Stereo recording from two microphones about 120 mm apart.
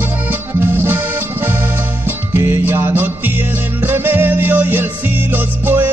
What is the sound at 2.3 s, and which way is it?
Music, 20° right (ahead or behind).